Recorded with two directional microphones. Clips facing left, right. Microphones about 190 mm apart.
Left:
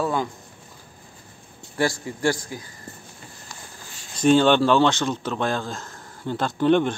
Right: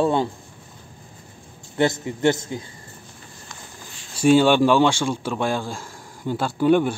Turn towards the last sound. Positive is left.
turn(degrees=-10)  # may be behind; listen again after turning